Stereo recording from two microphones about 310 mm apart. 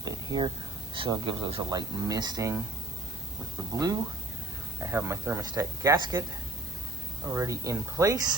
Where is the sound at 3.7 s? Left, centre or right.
Centre.